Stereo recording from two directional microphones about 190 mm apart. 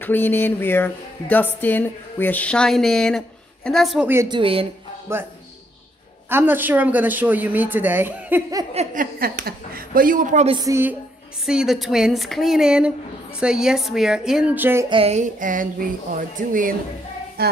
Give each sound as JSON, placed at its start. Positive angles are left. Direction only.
{"t": 0.0, "sound": "a woman's voice", "side_deg": 10}
{"t": 4.1, "sound": "speech", "side_deg": -15}
{"t": 4.4, "sound": "speech", "side_deg": -30}
{"t": 5.1, "sound": "speech", "side_deg": -15}
{"t": 6.3, "sound": "speech", "side_deg": -10}
{"t": 8.7, "sound": "a sound", "side_deg": -45}
{"t": 10.5, "sound": "speech", "side_deg": -15}
{"t": 11.4, "sound": "a woman's voice", "side_deg": 0}
{"t": 14.9, "sound": "a sound", "side_deg": -30}
{"t": 17.4, "sound": "a sound", "side_deg": -55}